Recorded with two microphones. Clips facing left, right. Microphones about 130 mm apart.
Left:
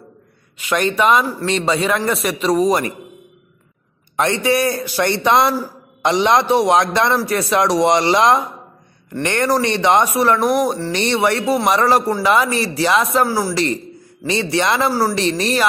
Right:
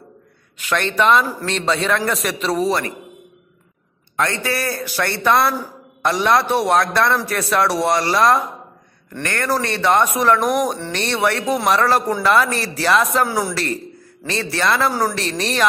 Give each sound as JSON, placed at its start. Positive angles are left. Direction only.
{"t": 0.6, "sound": "speech", "side_deg": 5}
{"t": 4.2, "sound": "a man's voice", "side_deg": 20}
{"t": 14.2, "sound": "a man's voice", "side_deg": 15}
{"t": 14.9, "sound": "speech", "side_deg": 5}